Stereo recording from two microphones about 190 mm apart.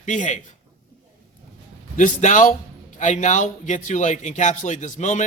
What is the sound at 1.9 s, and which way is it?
A man's voice, 40° left (ahead or behind).